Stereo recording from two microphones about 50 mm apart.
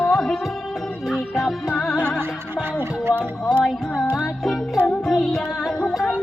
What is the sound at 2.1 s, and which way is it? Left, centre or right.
Music, right.